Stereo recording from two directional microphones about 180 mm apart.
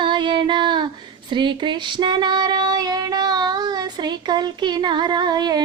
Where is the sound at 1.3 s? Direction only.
25° right (ahead or behind).